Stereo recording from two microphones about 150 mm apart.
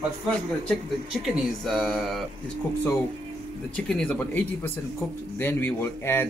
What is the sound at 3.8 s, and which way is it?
Speech, 5° left (ahead or behind).